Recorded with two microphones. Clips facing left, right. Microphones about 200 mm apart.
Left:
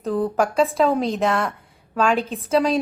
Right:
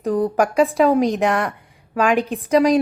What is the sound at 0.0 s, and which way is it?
A woman's voice, 15° right (ahead or behind).